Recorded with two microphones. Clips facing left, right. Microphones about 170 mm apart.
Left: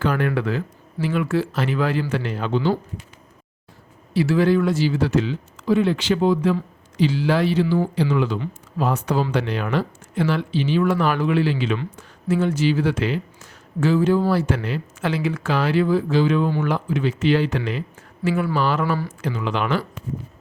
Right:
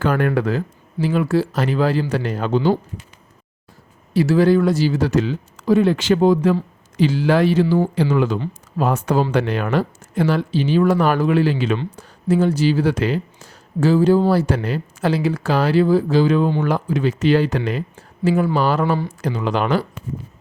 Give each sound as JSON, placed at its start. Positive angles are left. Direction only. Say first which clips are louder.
{"t": 0.0, "sound": "speech", "louder": "right 3 dB", "side_deg": -50}
{"t": 4.1, "sound": "speech", "louder": "right 3 dB", "side_deg": -40}